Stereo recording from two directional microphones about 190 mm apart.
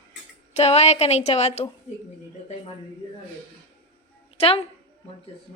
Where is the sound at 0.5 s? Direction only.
35° left (ahead or behind).